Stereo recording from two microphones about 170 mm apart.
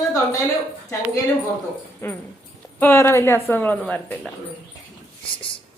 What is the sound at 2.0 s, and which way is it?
A woman's voice, 15° left (ahead or behind).